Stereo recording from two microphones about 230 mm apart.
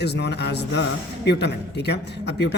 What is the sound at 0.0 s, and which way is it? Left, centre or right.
A man's voice, left.